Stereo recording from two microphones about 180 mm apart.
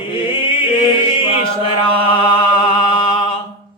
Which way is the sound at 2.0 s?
30° left (ahead or behind).